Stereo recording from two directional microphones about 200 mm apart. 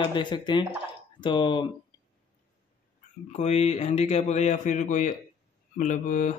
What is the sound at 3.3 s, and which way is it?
Speech, 35° left (ahead or behind).